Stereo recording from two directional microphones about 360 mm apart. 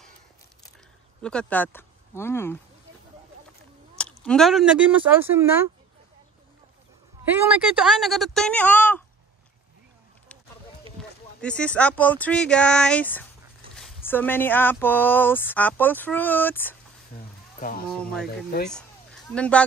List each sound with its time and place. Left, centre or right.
1.2 s speech: centre
4.0 s speech: centre
7.6 s speech: centre
11.0 s speech: centre
17.6 s speech: left
17.8 s speech: centre
18.2 s speech: left
18.7 s a sound: centre